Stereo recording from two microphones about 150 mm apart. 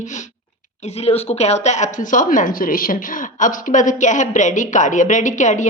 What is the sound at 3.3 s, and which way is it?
A woman's voice, 60° left (ahead or behind).